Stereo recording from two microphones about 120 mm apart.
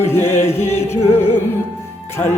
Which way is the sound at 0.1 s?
20° left (ahead or behind).